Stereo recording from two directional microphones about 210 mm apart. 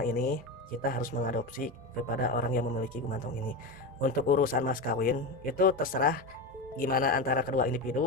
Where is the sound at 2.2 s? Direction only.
40° left (ahead or behind).